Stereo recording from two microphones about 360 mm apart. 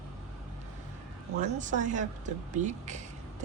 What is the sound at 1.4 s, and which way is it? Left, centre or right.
Speech, centre.